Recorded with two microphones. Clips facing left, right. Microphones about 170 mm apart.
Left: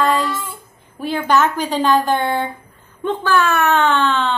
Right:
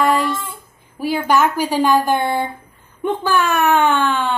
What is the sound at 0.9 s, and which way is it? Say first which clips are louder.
A woman's voice: even; 10° right (ahead or behind).